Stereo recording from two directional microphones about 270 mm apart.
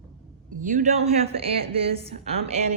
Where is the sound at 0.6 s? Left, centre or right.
Right.